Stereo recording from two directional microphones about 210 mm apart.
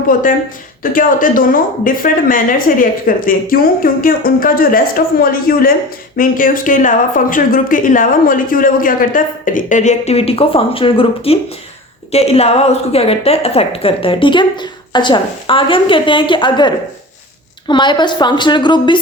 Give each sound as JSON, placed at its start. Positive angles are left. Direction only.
{"t": 0.1, "sound": "a woman's voice", "side_deg": 40}